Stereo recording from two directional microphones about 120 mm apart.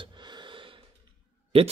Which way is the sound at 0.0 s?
40° right (ahead or behind).